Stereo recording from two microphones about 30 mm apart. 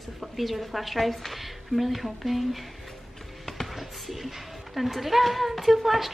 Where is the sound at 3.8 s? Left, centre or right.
Centre.